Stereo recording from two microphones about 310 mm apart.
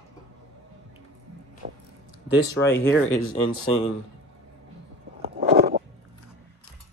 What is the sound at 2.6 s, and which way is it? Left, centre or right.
Speech, centre.